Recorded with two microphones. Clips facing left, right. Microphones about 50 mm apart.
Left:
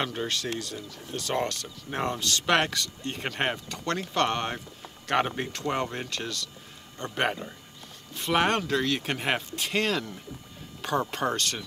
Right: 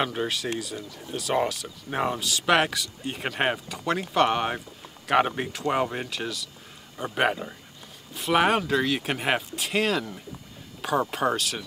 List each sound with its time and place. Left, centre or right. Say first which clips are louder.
0.0 s speech: right 3 dB; centre